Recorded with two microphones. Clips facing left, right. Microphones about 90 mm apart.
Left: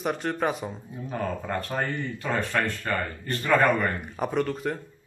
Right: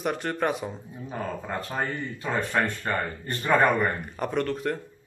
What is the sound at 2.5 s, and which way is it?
Speech, 20° right (ahead or behind).